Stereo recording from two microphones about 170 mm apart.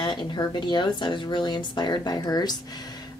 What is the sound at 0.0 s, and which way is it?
Speech, 25° left (ahead or behind).